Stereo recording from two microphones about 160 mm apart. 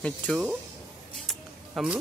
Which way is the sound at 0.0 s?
5° left (ahead or behind).